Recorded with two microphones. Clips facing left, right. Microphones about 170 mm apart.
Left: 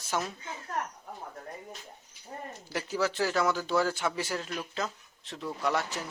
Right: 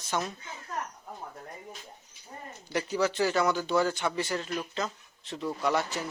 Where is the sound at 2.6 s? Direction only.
Centre (ahead or behind).